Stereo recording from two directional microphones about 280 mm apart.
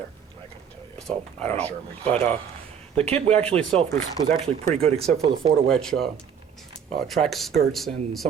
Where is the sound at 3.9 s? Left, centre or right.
Centre.